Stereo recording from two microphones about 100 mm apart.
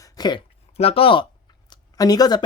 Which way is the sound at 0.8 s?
70° left (ahead or behind).